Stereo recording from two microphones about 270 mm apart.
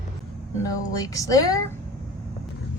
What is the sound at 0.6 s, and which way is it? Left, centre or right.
Speech, centre.